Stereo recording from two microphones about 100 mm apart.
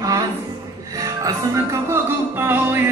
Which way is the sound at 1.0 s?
30° right (ahead or behind).